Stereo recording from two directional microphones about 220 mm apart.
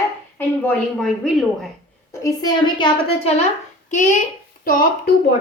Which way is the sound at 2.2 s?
20° left (ahead or behind).